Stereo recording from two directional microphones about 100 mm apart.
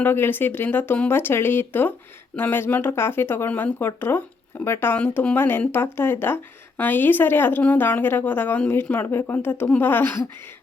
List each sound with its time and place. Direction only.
0.0 s speech: 20° left (ahead or behind)